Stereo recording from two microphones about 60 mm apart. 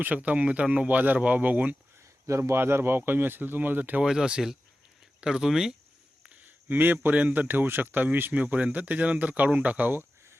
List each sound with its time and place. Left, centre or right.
0.0 s speech: right
2.4 s speech: right
4.0 s speech: centre
6.7 s speech: right
9.9 s a sound: right